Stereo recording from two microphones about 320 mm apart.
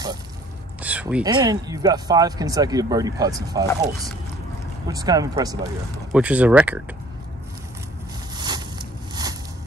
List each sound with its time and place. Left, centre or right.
0.8 s speech: centre
4.8 s speech: centre
8.4 s a sound: centre